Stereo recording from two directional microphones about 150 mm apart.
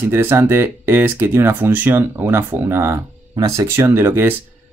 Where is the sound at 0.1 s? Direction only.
15° right (ahead or behind).